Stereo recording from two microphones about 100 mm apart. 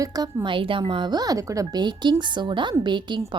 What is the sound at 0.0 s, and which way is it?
Speech, 40° right (ahead or behind).